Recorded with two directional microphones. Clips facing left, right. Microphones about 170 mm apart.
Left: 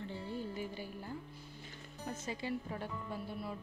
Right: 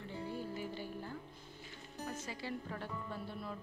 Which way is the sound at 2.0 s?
20° left (ahead or behind).